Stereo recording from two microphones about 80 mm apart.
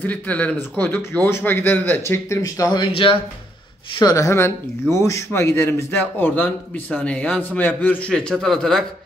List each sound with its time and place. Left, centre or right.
0.0 s a man's voice: centre
2.2 s speech: left
4.0 s speech: left
4.3 s a man's voice: left; by 8.8 s centre